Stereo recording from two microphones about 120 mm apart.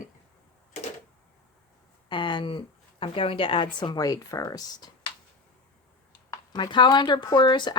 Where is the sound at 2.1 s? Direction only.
40° left (ahead or behind).